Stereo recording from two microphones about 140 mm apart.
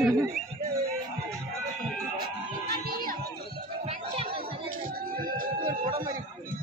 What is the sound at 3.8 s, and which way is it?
Music, 45° right (ahead or behind).